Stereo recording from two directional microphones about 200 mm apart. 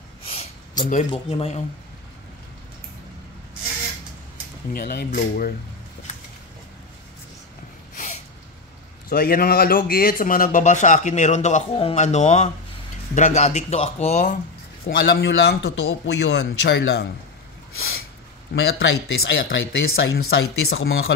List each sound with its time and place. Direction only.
0.2 s a sound: 30° left (ahead or behind)
4.7 s speech: 45° left (ahead or behind)
7.9 s sneeze: 35° left (ahead or behind)
9.1 s speech: 50° left (ahead or behind)
15.0 s a man's voice: 60° left (ahead or behind)
18.5 s speech: 60° left (ahead or behind)